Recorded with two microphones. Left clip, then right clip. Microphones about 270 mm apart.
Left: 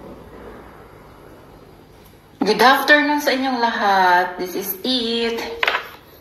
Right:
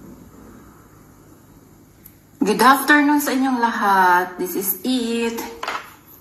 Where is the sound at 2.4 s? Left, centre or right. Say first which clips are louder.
Left 1 dB; left.